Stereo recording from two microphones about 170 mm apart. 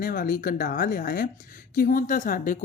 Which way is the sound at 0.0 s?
55° left (ahead or behind).